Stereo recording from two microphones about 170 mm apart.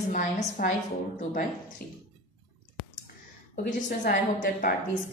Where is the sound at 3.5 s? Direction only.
50° left (ahead or behind).